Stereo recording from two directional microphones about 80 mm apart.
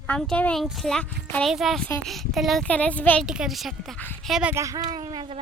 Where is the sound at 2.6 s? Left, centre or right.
Centre.